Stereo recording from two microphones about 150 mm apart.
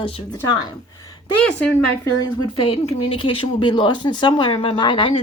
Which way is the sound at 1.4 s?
10° left (ahead or behind).